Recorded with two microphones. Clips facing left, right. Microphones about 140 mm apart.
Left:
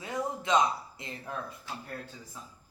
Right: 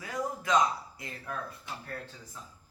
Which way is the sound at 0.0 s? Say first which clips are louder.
Left 1 dB; 25° left (ahead or behind).